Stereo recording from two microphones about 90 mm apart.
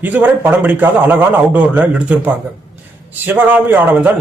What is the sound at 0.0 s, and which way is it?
A man's voice, 20° right (ahead or behind).